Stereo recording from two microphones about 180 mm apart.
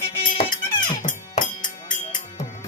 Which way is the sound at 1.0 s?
45° left (ahead or behind).